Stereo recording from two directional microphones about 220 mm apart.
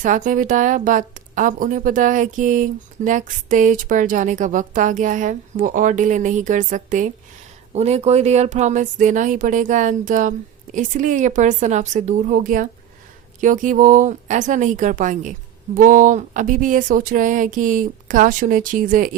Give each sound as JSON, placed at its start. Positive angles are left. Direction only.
{"t": 0.0, "sound": "a woman's voice", "side_deg": -35}